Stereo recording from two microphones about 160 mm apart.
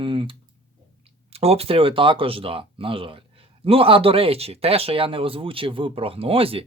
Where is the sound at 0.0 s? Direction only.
30° right (ahead or behind).